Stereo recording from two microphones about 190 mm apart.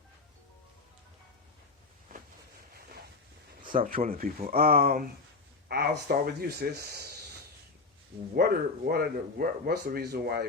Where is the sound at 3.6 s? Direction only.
45° right (ahead or behind).